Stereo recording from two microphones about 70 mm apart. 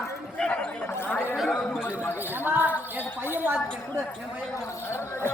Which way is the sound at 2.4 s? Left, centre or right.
Right.